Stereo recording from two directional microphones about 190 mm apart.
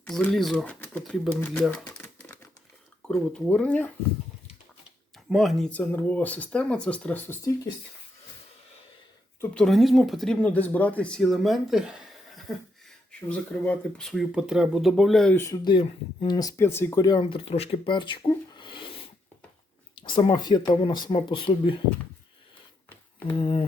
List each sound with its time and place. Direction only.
0.0 s speech: 5° left (ahead or behind)
1.4 s typewriter: 10° left (ahead or behind)
3.1 s speech: centre (ahead or behind)
5.3 s speech: centre (ahead or behind)
9.4 s speech: 5° left (ahead or behind); by 18.9 s 25° left (ahead or behind)
20.0 s speech: 25° left (ahead or behind)
23.4 s speech: 30° left (ahead or behind)